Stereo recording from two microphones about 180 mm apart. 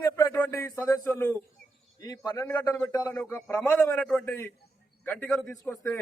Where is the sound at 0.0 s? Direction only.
15° left (ahead or behind).